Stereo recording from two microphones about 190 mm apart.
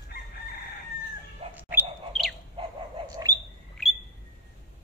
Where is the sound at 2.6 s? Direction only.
25° right (ahead or behind).